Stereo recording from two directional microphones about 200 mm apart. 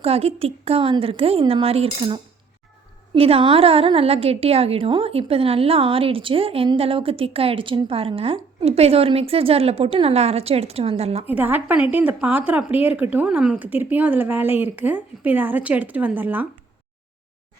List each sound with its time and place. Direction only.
0.0 s a woman's voice: 30° right (ahead or behind)
11.3 s speech: 10° right (ahead or behind)